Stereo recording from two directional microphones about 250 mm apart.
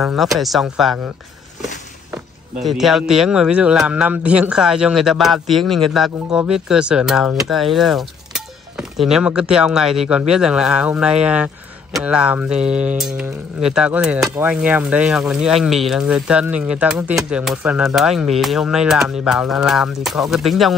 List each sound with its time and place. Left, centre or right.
0.0 s a man's voice: centre
2.6 s a man's voice: centre